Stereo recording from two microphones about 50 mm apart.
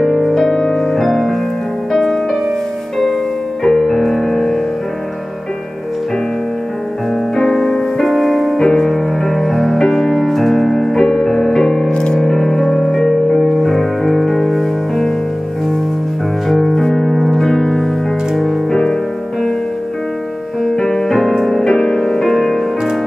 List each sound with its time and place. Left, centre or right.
0.0 s music: centre
0.3 s music: centre
3.6 s music: centre
7.3 s music: centre
11.9 s music: centre
12.2 s music: centre
16.4 s music: centre
20.6 s music: centre